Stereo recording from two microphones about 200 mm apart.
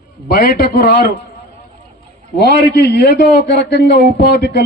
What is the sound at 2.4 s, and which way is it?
A man's voice, 55° left (ahead or behind).